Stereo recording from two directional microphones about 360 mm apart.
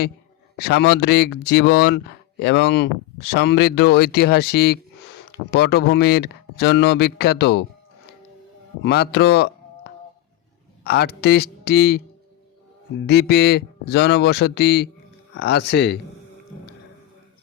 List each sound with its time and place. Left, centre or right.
0.6 s speech: left
8.8 s speech: left
13.1 s speech: left